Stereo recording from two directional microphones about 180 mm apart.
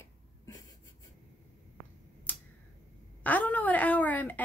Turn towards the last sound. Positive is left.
turn(degrees=10)  # may be behind; listen again after turning